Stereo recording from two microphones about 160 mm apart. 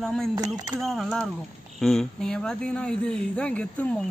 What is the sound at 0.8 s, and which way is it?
Speech, centre (ahead or behind).